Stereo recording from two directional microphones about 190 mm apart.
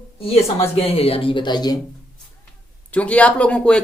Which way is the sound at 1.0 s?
30° left (ahead or behind).